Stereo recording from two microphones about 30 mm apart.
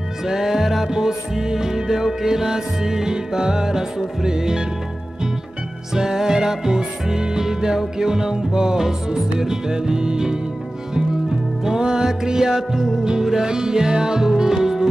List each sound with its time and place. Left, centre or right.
0.3 s music: centre
0.9 s music: centre
5.9 s music: centre
11.6 s music: right
13.0 s music: right